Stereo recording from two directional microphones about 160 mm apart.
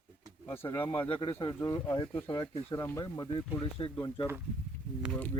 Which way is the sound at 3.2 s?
35° left (ahead or behind).